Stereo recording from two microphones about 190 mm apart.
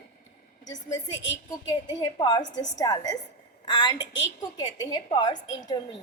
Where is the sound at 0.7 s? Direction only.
20° left (ahead or behind).